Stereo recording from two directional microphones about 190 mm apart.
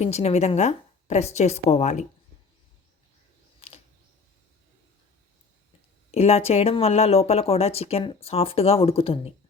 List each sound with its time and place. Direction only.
0.0 s speech: 35° left (ahead or behind)
3.6 s a sound: 30° left (ahead or behind)
6.1 s speech: 35° left (ahead or behind)